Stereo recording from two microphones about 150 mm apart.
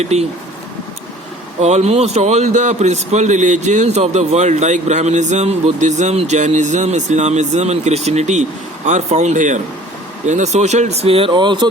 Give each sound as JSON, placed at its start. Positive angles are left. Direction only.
{"t": 0.0, "sound": "a man's voice", "side_deg": -45}
{"t": 1.6, "sound": "a man's voice", "side_deg": -45}